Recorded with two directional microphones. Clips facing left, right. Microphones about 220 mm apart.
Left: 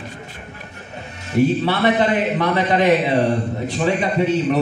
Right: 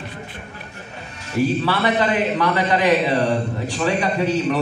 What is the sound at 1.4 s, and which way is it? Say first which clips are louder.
A man's voice: left 3 dB; 25° left (ahead or behind).